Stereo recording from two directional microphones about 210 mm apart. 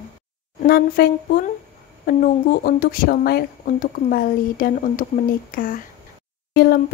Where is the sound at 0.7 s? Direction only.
50° left (ahead or behind).